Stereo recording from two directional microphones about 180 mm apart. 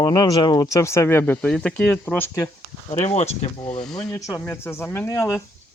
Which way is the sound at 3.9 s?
15° left (ahead or behind).